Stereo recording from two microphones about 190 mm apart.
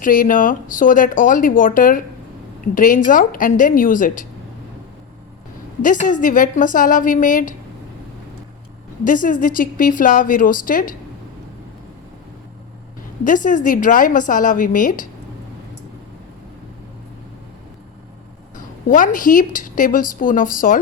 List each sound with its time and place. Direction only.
0.0 s speech: 45° left (ahead or behind)
5.8 s speech: 45° left (ahead or behind)
9.0 s speech: 45° left (ahead or behind)
13.2 s speech: 45° left (ahead or behind)
18.5 s a woman's voice: 45° left (ahead or behind)